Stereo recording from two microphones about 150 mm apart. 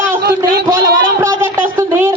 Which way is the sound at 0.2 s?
90° right.